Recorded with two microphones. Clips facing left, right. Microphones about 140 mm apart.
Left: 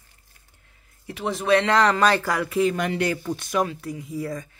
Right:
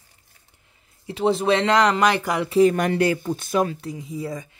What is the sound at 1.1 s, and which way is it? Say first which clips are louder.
Speech: right 2 dB; 30° right (ahead or behind).